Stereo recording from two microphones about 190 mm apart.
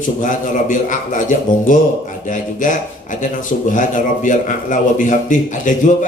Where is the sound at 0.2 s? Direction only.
45° left (ahead or behind).